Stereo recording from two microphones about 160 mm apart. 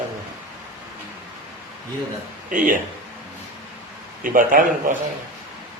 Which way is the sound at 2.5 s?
60° right (ahead or behind).